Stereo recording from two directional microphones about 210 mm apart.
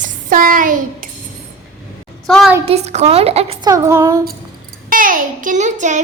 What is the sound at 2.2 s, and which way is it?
Speech, centre (ahead or behind).